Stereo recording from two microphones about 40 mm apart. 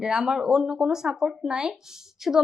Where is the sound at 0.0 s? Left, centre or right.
Centre.